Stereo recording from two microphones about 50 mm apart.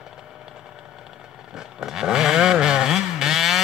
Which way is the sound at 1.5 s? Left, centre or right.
Centre.